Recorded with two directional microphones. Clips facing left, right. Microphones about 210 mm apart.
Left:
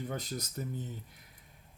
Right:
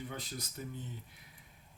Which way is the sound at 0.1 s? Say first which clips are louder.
Left 6 dB; 40° left (ahead or behind).